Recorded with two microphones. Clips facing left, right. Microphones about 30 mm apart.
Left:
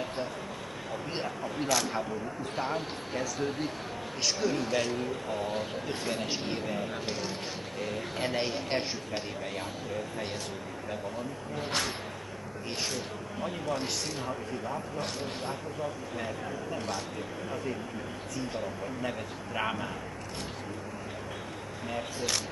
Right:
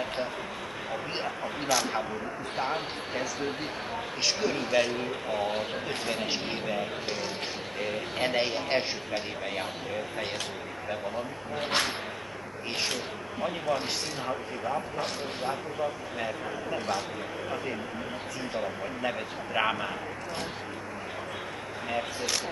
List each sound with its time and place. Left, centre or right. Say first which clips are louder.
1.1 s a man's voice: right 1 dB; right
11.5 s speech: right 4 dB; right
13.4 s a man's voice: right 4 dB; right
18.6 s a man's voice: right 3 dB; right